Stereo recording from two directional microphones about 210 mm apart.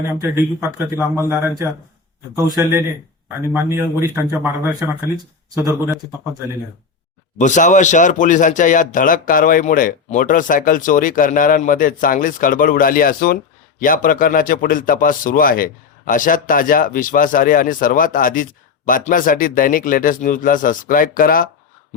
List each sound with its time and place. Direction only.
0.1 s a man's voice: 15° right (ahead or behind)
7.3 s speech: 35° left (ahead or behind)